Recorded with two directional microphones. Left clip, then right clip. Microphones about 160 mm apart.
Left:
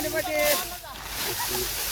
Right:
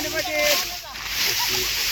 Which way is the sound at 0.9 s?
55° left (ahead or behind).